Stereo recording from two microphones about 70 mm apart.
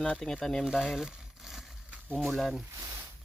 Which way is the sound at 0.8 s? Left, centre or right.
Centre.